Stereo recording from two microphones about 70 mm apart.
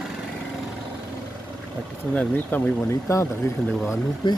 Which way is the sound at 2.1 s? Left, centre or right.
Left.